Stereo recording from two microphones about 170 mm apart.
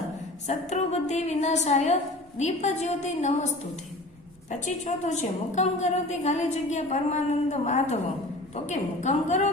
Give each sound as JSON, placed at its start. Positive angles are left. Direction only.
{"t": 0.4, "sound": "a woman's voice", "side_deg": 40}
{"t": 4.6, "sound": "a woman's voice", "side_deg": 45}